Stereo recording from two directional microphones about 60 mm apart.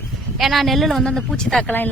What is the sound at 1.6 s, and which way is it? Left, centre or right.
Speech, left.